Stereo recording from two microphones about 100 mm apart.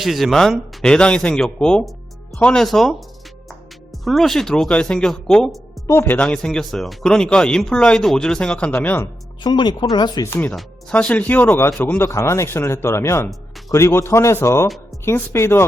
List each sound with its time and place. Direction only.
0.0 s speech: centre (ahead or behind)
4.0 s speech: centre (ahead or behind)
5.9 s speech: 25° left (ahead or behind)
6.1 s speech: 10° left (ahead or behind)
9.4 s speech: 50° left (ahead or behind)
10.2 s speech: 25° left (ahead or behind)
10.5 s speech: centre (ahead or behind)
10.9 s speech: 15° left (ahead or behind)